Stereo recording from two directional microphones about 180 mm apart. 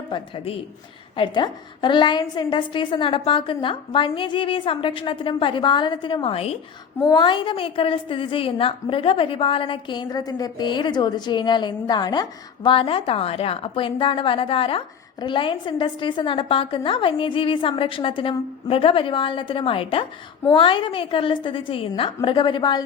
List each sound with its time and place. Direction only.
0.1 s a woman's voice: 30° left (ahead or behind)